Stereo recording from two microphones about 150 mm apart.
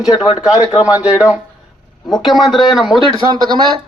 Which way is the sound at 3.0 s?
30° right (ahead or behind).